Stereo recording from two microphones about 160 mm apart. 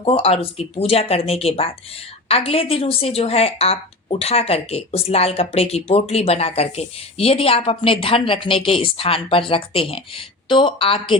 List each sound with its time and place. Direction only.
0.0 s a woman's voice: 35° left (ahead or behind)